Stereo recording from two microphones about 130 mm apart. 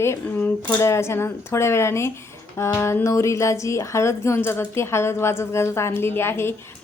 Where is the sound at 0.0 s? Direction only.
20° left (ahead or behind).